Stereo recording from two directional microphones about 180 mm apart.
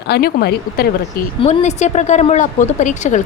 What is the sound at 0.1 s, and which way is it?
Speech, 60° left (ahead or behind).